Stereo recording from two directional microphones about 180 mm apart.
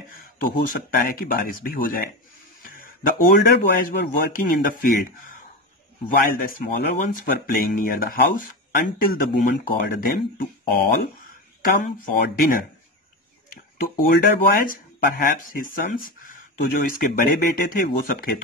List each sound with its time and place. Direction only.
0.4 s speech: 50° left (ahead or behind)
2.6 s a sound: 50° left (ahead or behind)
3.3 s speech: 65° left (ahead or behind)
13.8 s speech: 55° left (ahead or behind)